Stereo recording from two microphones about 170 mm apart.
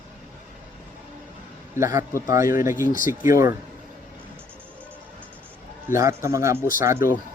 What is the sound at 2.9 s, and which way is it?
Speech, 55° left (ahead or behind).